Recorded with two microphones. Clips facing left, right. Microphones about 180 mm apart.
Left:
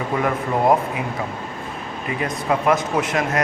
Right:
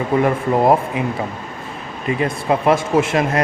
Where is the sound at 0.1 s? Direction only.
25° right (ahead or behind).